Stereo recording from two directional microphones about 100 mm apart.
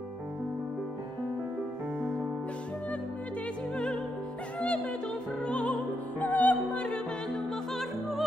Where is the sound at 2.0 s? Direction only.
20° right (ahead or behind).